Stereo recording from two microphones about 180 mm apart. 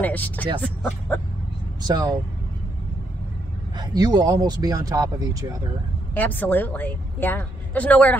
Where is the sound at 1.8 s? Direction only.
20° right (ahead or behind).